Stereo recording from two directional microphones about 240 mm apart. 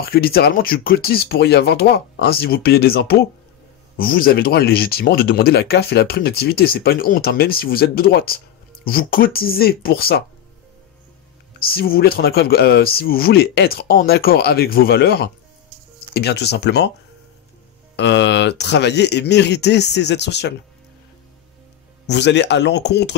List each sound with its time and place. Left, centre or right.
0.0 s speech: left
11.6 s speech: left
17.9 s speech: left
22.0 s speech: left